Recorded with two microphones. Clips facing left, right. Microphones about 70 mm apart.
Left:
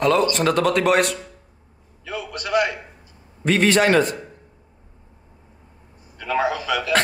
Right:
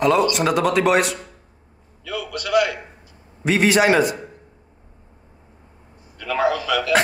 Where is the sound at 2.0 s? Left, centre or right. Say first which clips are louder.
Right 2 dB; left.